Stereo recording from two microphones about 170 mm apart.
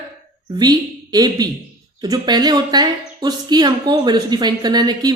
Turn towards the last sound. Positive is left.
turn(degrees=-25)  # may be behind; listen again after turning